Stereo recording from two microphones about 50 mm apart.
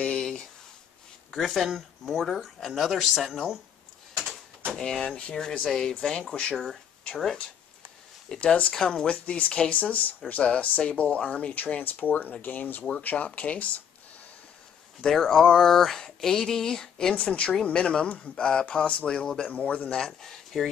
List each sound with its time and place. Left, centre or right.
0.2 s a sound: centre
1.3 s speech: centre
3.2 s speech: centre
4.7 s speech: centre
5.0 s speech: left
8.4 s speech: left
8.7 s speech: centre
9.1 s speech: left
15.0 s speech: centre
17.2 s speech: left
18.0 s speech: left
18.3 s speech: centre
20.0 s speech: centre